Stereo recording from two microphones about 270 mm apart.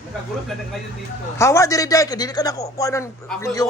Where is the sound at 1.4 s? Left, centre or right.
Centre.